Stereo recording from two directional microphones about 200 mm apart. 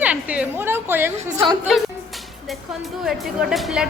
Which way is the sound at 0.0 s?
5° right (ahead or behind).